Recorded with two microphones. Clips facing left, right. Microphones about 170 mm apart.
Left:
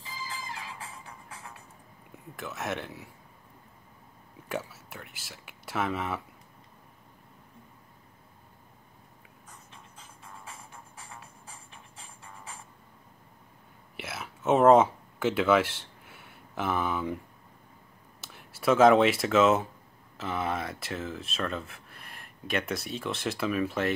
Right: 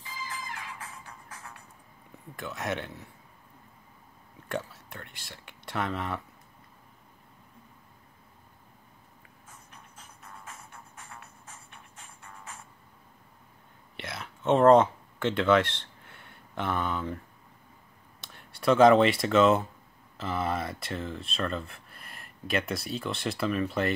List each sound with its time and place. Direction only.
0.7 s music: 25° left (ahead or behind)
2.3 s speech: centre (ahead or behind)
4.5 s speech: 5° left (ahead or behind)
13.9 s a sound: 5° left (ahead or behind)
18.2 s speech: 5° left (ahead or behind)